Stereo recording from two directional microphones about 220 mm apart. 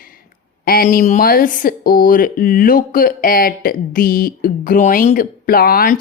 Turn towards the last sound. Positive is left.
turn(degrees=40)  # may be behind; listen again after turning